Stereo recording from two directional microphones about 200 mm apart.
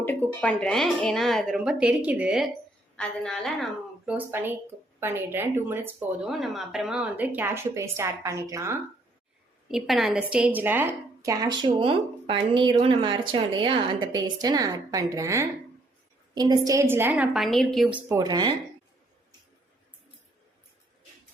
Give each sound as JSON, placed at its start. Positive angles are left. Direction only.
{"t": 0.0, "sound": "a woman's voice", "side_deg": 10}
{"t": 4.3, "sound": "speech", "side_deg": -10}
{"t": 9.7, "sound": "a woman's voice", "side_deg": 0}
{"t": 18.2, "sound": "a woman's voice", "side_deg": -20}